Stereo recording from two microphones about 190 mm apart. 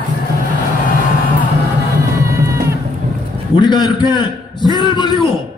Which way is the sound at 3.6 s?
20° left (ahead or behind).